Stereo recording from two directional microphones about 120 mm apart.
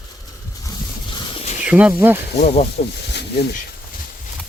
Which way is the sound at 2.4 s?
65° left (ahead or behind).